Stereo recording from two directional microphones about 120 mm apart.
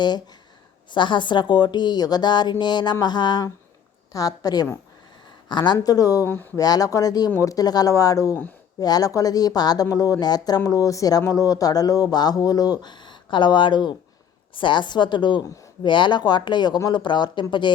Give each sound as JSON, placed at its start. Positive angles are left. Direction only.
{"t": 0.9, "sound": "speech", "side_deg": 40}
{"t": 6.2, "sound": "speech", "side_deg": 15}
{"t": 6.6, "sound": "speech", "side_deg": 30}